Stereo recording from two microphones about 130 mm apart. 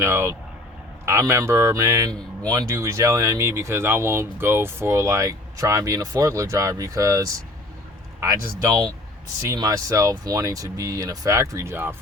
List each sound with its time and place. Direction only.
0.0 s speech: 20° right (ahead or behind)